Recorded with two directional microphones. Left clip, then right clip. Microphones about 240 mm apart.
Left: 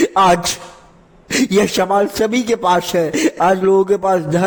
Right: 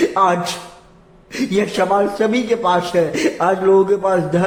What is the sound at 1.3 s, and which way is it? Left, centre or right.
A man's voice, left.